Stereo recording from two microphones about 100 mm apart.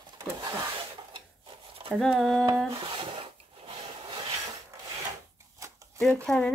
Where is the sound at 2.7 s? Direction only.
60° right (ahead or behind).